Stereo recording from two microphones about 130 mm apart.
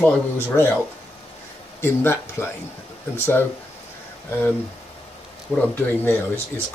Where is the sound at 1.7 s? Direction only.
15° left (ahead or behind).